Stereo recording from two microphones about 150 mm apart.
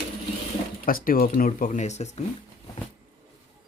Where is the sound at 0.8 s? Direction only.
75° left (ahead or behind); by 2.2 s 50° left (ahead or behind).